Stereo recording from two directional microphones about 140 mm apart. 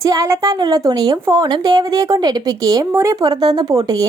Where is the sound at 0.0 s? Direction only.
25° right (ahead or behind).